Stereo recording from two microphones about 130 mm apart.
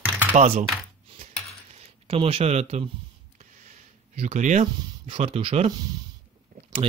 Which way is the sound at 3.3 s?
65° right (ahead or behind).